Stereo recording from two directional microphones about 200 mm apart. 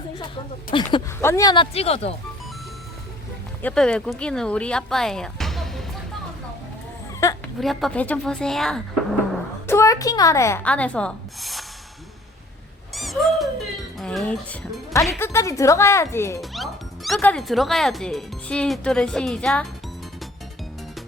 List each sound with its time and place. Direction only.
0.7 s speech: 25° left (ahead or behind)
3.6 s speech: 5° left (ahead or behind)
7.2 s a sound: 15° left (ahead or behind)
7.6 s speech: centre (ahead or behind)
9.6 s speech: 15° left (ahead or behind)
12.9 s a sound: centre (ahead or behind)
14.0 s speech: centre (ahead or behind)
16.4 s music: centre (ahead or behind)
17.2 s speech: 5° left (ahead or behind)